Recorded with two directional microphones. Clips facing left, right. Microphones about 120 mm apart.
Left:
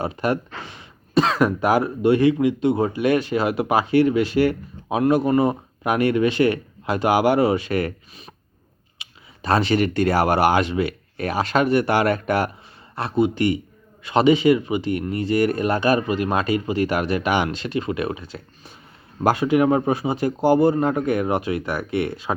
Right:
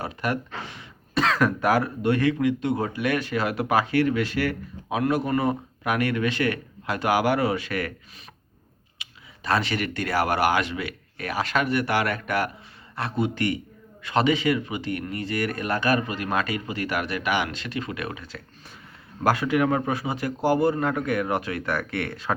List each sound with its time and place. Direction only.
0.0 s speech: 25° left (ahead or behind)
9.4 s speech: 30° left (ahead or behind)